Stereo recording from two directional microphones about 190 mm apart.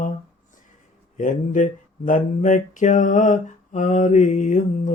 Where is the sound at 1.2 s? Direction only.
45° left (ahead or behind).